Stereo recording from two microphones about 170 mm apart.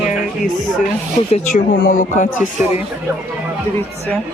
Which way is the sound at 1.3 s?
50° left (ahead or behind).